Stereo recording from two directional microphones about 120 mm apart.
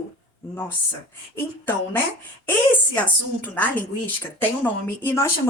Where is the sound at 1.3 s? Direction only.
15° left (ahead or behind).